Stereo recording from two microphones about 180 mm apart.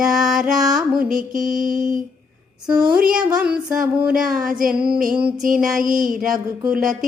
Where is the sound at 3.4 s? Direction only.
5° right (ahead or behind).